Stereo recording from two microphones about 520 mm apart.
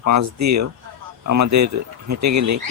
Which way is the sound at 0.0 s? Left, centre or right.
Right.